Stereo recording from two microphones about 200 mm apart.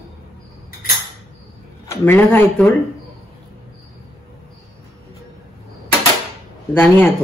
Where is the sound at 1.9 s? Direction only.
10° left (ahead or behind).